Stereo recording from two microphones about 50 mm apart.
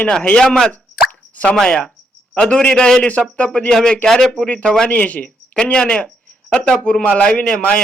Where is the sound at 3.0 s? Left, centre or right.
Left; by 4.5 s centre.